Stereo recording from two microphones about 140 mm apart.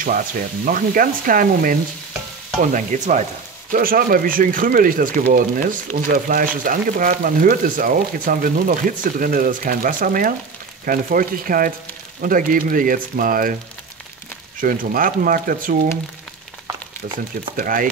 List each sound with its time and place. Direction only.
0.7 s frying: 75° right (ahead or behind)
2.7 s frying: 65° right (ahead or behind)
3.7 s speech: 90° right
14.6 s speech: 85° right
17.6 s speech: 80° right